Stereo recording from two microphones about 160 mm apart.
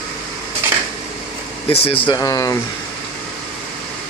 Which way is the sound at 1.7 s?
35° left (ahead or behind).